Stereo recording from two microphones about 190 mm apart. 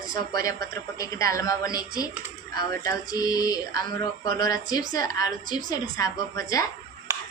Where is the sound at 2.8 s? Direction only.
20° left (ahead or behind).